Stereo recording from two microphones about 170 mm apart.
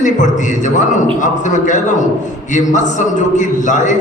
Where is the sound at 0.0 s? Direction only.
45° left (ahead or behind).